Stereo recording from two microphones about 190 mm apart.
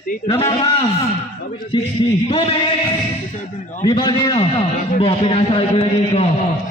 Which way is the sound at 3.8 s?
20° left (ahead or behind).